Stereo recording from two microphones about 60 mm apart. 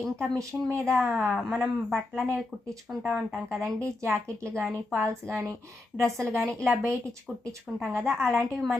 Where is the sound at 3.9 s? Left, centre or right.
Right.